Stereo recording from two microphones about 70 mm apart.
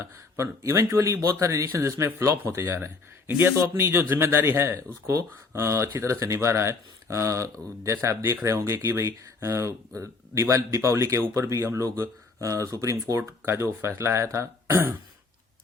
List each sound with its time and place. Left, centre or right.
0.0 s speech: right
1.6 s speech: right
13.4 s speech: right